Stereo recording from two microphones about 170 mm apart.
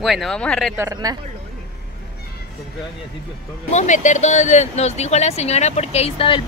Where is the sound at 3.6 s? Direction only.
45° left (ahead or behind).